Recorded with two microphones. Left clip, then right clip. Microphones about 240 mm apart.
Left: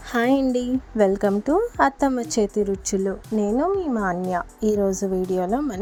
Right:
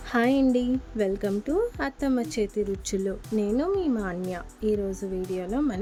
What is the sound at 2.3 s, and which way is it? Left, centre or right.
Speech, centre.